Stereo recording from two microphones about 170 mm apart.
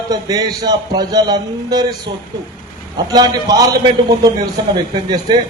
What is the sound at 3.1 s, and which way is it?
A man's voice, 20° right (ahead or behind).